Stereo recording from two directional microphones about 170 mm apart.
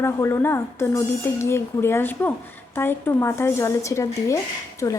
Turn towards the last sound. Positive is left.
turn(degrees=20)  # may be behind; listen again after turning